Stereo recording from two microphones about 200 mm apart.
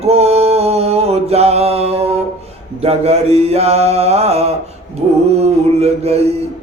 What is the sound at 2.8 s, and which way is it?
Mantra, 30° right (ahead or behind).